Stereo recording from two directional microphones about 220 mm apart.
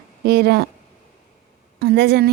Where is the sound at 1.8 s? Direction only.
50° right (ahead or behind).